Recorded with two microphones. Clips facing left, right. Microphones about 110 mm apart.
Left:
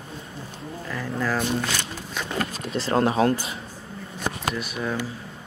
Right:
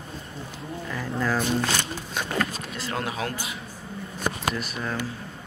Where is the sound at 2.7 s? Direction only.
30° left (ahead or behind).